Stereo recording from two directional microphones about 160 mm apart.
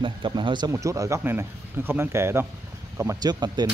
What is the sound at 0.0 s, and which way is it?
Speech, 30° right (ahead or behind).